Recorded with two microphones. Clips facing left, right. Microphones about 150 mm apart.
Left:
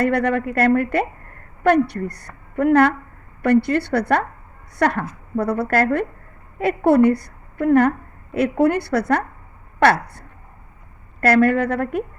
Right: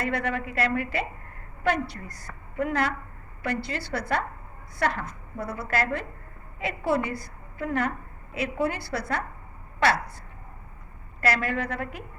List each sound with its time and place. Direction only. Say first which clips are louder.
0.0 s a woman's voice: left 10 dB; 60° left (ahead or behind)